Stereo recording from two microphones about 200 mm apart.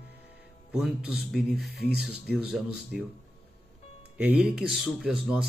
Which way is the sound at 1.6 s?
55° right (ahead or behind).